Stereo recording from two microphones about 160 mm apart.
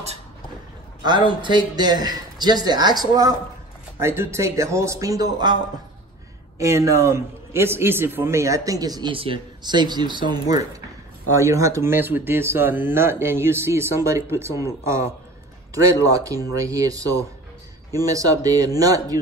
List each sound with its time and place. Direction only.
1.4 s a man's voice: 30° right (ahead or behind)
6.6 s a man's voice: 20° right (ahead or behind)